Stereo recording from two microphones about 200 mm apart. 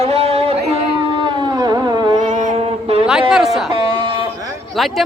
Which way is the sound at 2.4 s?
30° right (ahead or behind).